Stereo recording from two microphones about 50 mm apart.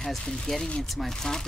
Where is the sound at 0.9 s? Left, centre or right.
Centre.